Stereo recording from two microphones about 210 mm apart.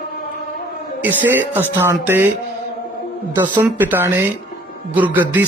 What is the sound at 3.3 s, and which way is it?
Speech, 20° right (ahead or behind).